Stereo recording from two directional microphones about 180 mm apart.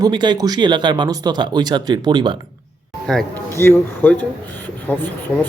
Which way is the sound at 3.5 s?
15° left (ahead or behind).